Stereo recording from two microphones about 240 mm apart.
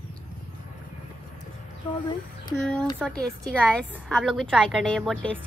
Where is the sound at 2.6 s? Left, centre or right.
Centre.